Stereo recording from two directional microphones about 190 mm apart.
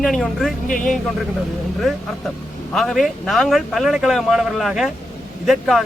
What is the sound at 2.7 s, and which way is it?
Speech, centre (ahead or behind).